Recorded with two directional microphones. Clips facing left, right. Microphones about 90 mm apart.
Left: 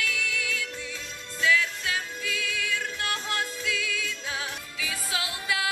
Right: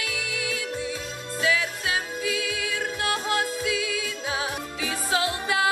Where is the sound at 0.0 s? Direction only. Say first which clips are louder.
Even; 15° right (ahead or behind).